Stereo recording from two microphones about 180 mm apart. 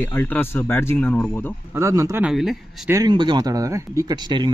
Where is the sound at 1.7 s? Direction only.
15° right (ahead or behind).